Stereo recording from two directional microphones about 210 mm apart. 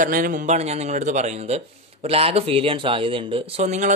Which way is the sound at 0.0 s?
40° right (ahead or behind).